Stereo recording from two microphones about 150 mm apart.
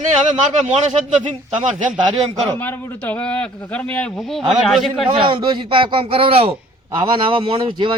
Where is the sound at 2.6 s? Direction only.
10° left (ahead or behind).